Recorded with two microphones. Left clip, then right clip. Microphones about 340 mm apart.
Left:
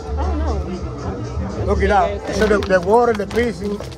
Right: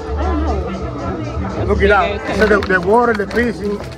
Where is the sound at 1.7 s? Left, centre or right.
Left.